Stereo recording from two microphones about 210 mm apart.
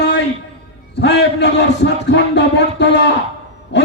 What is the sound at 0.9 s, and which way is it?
A man's voice, 55° left (ahead or behind).